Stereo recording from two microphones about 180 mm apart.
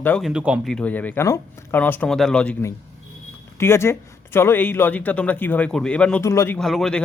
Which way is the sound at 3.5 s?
15° left (ahead or behind).